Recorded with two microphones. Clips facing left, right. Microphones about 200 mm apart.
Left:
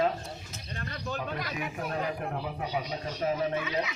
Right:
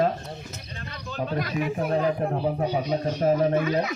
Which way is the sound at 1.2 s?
35° right (ahead or behind).